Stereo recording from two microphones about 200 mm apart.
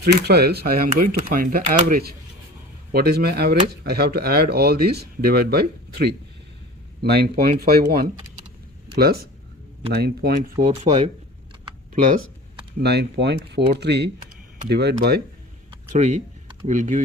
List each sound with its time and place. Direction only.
0.0 s speech: 55° right (ahead or behind)
10.7 s speech: 35° right (ahead or behind)
12.8 s speech: 55° right (ahead or behind)
15.9 s speech: 35° right (ahead or behind)